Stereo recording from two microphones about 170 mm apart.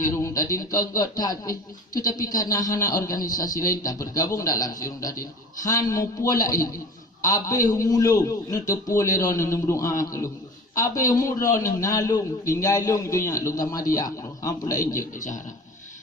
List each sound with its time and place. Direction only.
0.2 s speech: 20° left (ahead or behind)
15.1 s a man's voice: 50° left (ahead or behind)